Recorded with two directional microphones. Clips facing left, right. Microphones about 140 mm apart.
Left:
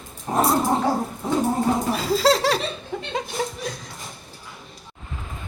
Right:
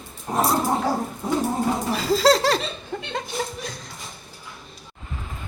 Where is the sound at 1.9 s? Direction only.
Centre (ahead or behind).